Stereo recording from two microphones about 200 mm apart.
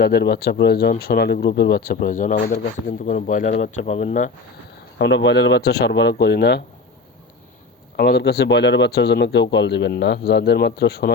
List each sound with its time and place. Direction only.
0.0 s speech: 55° left (ahead or behind); by 4.3 s 40° left (ahead or behind)
4.9 s speech: 60° left (ahead or behind)
7.9 s speech: 50° left (ahead or behind)